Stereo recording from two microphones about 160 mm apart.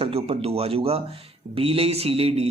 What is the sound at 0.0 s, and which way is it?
A man's voice, 40° right (ahead or behind).